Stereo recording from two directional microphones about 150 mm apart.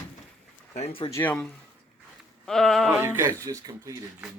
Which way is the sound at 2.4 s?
Centre (ahead or behind).